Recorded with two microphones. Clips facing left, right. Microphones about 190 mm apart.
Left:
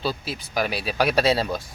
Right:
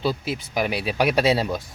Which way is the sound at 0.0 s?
20° right (ahead or behind).